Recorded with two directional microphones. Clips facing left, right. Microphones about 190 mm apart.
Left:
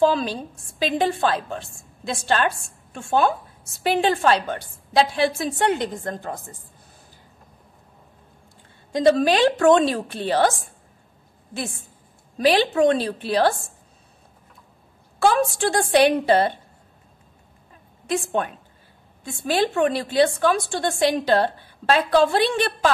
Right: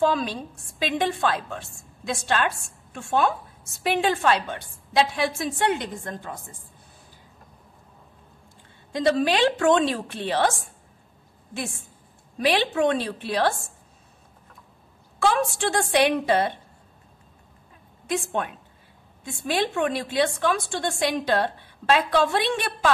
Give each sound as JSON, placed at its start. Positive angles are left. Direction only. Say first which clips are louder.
{"t": 0.1, "sound": "a woman's voice", "louder": "left 2 dB", "side_deg": 30}
{"t": 8.9, "sound": "a woman's voice", "louder": "left 4 dB", "side_deg": 40}
{"t": 12.4, "sound": "a woman's voice", "louder": "left 4 dB", "side_deg": 35}
{"t": 15.1, "sound": "a woman's voice", "louder": "left 3 dB", "side_deg": 35}
{"t": 18.0, "sound": "a woman's voice", "louder": "left 3 dB", "side_deg": 35}